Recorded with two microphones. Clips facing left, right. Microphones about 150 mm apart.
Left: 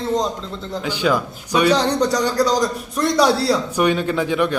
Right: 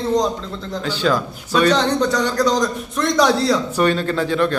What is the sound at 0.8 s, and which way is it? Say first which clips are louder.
A man's voice: even; 15° left (ahead or behind).